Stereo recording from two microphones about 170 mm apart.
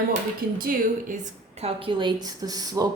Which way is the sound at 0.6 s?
55° right (ahead or behind).